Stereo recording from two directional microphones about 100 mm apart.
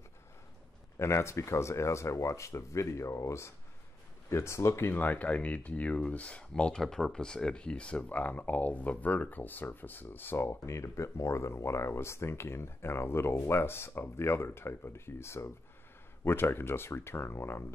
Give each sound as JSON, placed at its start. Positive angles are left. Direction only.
{"t": 0.9, "sound": "speech", "side_deg": 25}
{"t": 4.9, "sound": "speech", "side_deg": 15}